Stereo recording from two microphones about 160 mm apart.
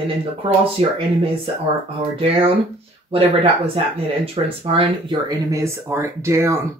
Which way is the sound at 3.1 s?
35° right (ahead or behind).